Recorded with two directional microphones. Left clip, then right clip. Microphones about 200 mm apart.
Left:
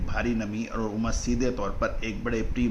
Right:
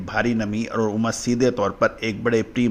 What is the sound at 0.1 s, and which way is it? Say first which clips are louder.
A man's voice: right 7 dB; 40° right (ahead or behind).